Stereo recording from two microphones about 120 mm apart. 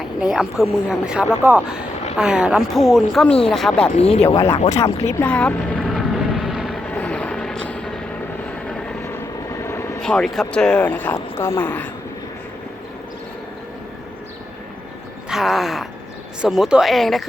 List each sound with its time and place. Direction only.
0.0 s a sound: 5° right (ahead or behind)
0.6 s speech: 5° right (ahead or behind)
3.9 s speech: 60° left (ahead or behind)
4.3 s speech: 30° left (ahead or behind)
4.7 s vehicle: 25° left (ahead or behind); by 6.7 s centre (ahead or behind)
6.9 s vehicle: 10° left (ahead or behind)
9.1 s vehicle: 25° left (ahead or behind)
10.0 s speech: 5° left (ahead or behind)
15.3 s speech: 5° right (ahead or behind)